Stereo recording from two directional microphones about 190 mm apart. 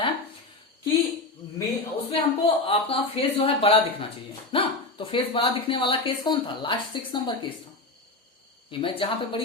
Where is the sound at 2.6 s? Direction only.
30° left (ahead or behind).